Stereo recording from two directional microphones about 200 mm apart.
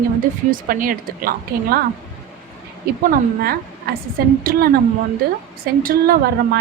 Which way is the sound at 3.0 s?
50° right (ahead or behind).